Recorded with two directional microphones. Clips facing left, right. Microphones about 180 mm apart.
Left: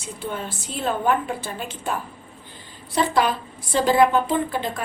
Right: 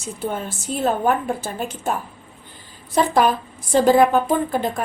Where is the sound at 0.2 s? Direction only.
45° right (ahead or behind).